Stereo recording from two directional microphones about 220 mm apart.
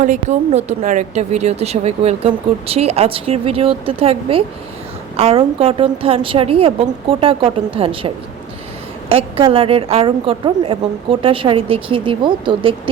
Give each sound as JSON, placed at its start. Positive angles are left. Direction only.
{"t": 0.0, "sound": "a woman's voice", "side_deg": -35}